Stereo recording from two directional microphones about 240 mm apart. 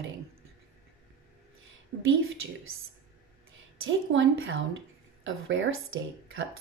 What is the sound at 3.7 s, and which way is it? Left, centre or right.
A woman's voice, right.